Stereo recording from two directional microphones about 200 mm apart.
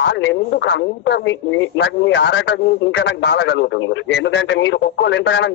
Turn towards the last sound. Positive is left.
turn(degrees=60)  # may be behind; listen again after turning